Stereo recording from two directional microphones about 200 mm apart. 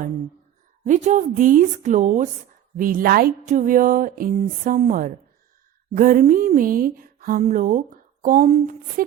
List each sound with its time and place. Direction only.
0.9 s a woman's voice: 35° right (ahead or behind)